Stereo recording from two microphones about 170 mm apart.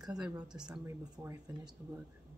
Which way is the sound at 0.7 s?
10° right (ahead or behind).